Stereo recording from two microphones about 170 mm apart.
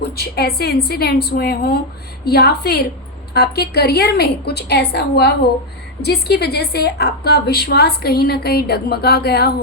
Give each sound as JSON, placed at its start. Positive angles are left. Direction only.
{"t": 0.2, "sound": "a woman's voice", "side_deg": 65}